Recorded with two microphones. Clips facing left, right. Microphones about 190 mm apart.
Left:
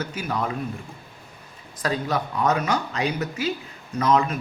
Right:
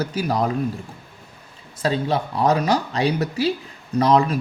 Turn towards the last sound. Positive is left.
turn(degrees=-35)  # may be behind; listen again after turning